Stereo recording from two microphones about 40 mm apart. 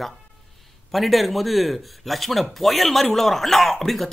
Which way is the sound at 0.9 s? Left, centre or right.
Centre.